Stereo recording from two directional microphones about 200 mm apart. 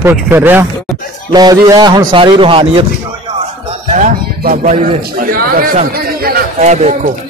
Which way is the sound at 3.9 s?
40° right (ahead or behind).